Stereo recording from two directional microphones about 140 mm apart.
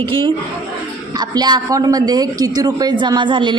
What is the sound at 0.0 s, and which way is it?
A woman's voice, 35° right (ahead or behind).